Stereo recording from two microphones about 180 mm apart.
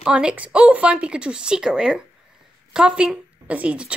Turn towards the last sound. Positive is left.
turn(degrees=-5)  # may be behind; listen again after turning